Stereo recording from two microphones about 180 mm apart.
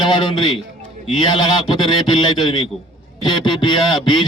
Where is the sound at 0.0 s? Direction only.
25° left (ahead or behind).